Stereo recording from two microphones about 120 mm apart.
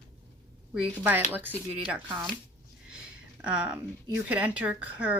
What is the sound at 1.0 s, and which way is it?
Speech, 15° right (ahead or behind).